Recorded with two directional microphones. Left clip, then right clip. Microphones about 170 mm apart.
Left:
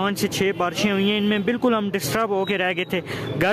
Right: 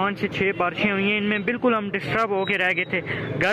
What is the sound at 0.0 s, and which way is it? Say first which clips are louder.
Speech: left 1 dB; 50° left (ahead or behind).